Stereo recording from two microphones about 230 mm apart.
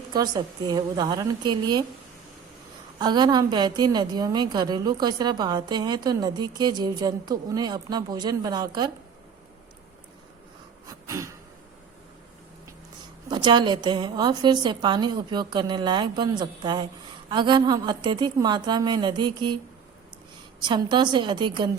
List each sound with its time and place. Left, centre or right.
0.1 s a woman's voice: centre
3.0 s a woman's voice: centre
10.8 s a sound: centre
13.3 s a woman's voice: centre
20.6 s a woman's voice: centre